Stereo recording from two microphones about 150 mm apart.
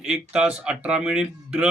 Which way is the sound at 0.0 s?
5° right (ahead or behind).